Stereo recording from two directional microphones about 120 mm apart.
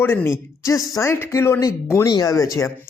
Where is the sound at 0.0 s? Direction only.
20° left (ahead or behind).